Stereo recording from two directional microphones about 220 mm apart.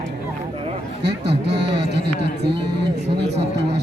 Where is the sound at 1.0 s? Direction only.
50° right (ahead or behind).